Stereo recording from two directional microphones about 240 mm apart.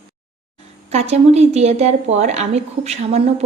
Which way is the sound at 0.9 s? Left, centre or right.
Right.